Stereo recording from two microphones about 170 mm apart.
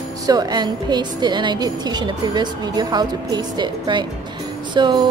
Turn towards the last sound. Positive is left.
turn(degrees=-25)  # may be behind; listen again after turning